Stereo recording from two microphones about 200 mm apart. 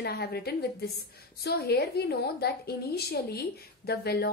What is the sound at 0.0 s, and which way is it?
A woman's voice, 55° left (ahead or behind).